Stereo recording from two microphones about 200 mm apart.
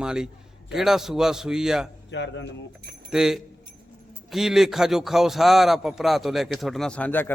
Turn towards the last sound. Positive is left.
turn(degrees=10)  # may be behind; listen again after turning